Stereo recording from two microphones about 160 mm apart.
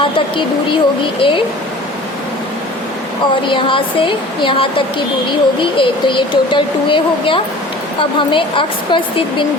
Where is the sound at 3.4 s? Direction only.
30° left (ahead or behind).